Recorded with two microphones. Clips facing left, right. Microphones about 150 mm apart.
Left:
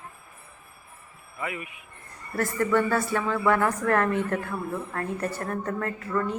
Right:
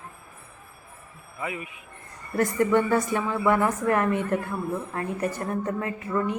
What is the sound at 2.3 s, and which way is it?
A woman's voice, 20° right (ahead or behind).